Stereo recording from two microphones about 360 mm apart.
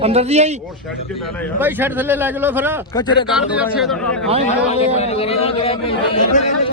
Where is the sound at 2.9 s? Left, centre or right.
Centre.